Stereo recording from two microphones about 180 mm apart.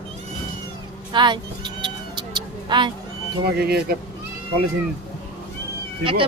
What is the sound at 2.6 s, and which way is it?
Speech, 25° right (ahead or behind).